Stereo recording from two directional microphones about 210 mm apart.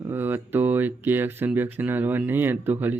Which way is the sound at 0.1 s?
10° right (ahead or behind).